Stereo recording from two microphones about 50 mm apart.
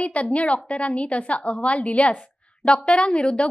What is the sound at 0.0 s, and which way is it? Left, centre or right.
A woman's voice, left.